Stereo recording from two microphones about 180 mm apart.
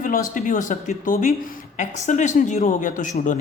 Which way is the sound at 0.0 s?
50° left (ahead or behind).